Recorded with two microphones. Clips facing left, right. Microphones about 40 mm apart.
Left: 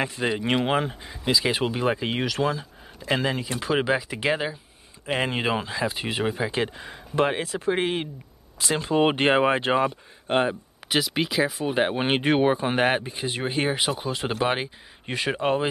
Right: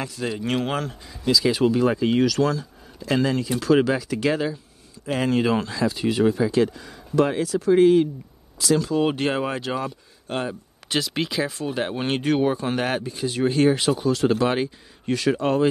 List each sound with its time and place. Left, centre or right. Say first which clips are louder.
0.0 s speech: left 2 dB; left
10.5 s speech: left 1 dB; centre
11.6 s speech: left 2 dB; left